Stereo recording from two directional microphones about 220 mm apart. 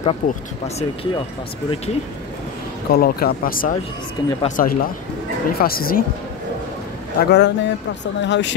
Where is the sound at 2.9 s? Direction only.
45° left (ahead or behind).